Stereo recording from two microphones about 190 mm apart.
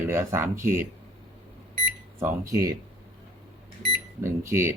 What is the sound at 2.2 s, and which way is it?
Speech, 15° right (ahead or behind).